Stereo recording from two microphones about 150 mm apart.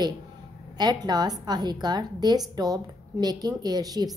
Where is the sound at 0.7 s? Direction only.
30° right (ahead or behind).